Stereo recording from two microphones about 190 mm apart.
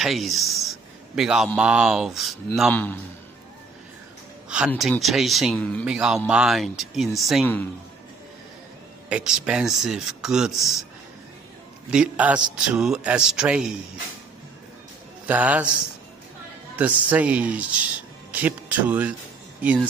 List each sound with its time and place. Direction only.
0.0 s a man's voice: centre (ahead or behind)
4.6 s speech: centre (ahead or behind)
5.9 s speech: 5° right (ahead or behind)
9.1 s speech: 5° right (ahead or behind)
11.9 s a man's voice: 5° right (ahead or behind)
15.2 s a man's voice: 10° right (ahead or behind)